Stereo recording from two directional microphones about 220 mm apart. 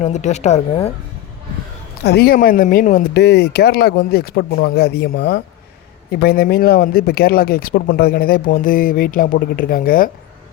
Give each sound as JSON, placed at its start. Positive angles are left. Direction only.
{"t": 0.0, "sound": "speech", "side_deg": 30}
{"t": 2.0, "sound": "speech", "side_deg": 45}